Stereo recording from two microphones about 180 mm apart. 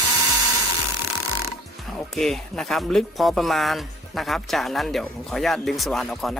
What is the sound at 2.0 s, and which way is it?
Speech, centre (ahead or behind).